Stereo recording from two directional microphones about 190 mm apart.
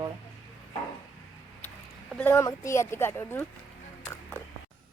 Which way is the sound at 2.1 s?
10° left (ahead or behind).